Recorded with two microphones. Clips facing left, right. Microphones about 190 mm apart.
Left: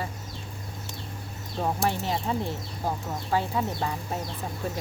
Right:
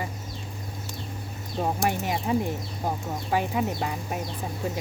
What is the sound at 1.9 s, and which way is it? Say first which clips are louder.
Speech: right 3 dB; 15° right (ahead or behind).